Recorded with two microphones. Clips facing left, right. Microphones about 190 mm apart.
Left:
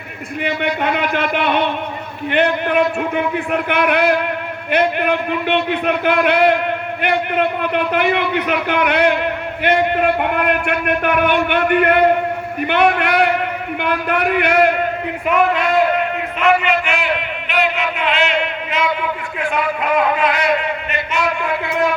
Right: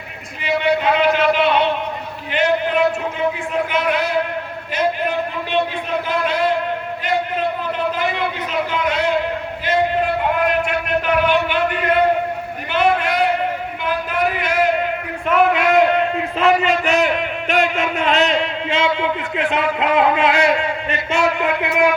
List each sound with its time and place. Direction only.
0.4 s a man's voice: 60° left (ahead or behind)
16.4 s a man's voice: 40° right (ahead or behind)